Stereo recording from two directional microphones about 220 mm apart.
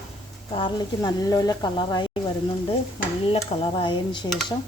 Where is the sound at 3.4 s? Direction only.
20° left (ahead or behind).